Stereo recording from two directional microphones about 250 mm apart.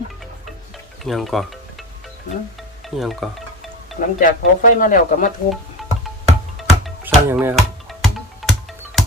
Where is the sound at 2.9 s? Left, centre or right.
Centre.